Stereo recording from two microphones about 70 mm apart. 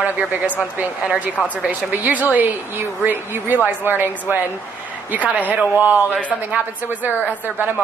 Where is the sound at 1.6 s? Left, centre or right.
Right.